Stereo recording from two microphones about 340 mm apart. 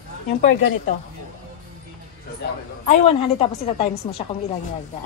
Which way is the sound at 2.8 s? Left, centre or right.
Centre.